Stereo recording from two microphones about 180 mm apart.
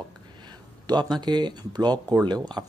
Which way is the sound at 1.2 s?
25° right (ahead or behind).